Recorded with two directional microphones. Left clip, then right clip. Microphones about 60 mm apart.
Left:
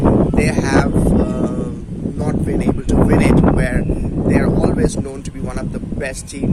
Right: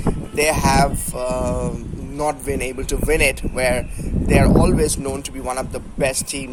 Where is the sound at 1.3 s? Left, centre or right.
Left.